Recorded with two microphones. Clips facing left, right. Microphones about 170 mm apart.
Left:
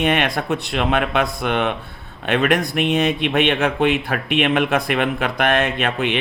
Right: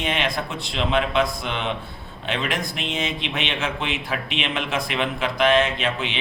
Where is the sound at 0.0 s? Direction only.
60° left (ahead or behind).